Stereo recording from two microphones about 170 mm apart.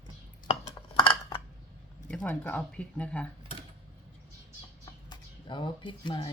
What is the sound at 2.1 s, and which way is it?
Speech, 10° left (ahead or behind).